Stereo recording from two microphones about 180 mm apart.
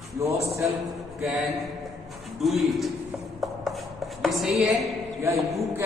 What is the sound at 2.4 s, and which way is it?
Speech, centre (ahead or behind).